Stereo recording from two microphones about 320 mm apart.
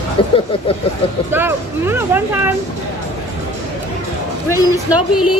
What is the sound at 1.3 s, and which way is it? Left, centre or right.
Speech, centre.